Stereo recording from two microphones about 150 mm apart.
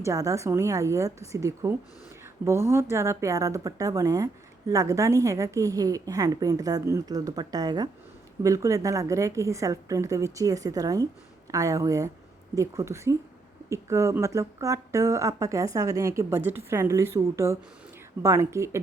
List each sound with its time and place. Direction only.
0.0 s a woman's voice: 20° right (ahead or behind)